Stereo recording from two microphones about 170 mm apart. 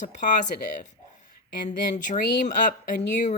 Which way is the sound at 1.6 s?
45° left (ahead or behind).